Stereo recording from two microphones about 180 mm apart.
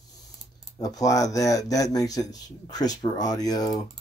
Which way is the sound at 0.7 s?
20° left (ahead or behind).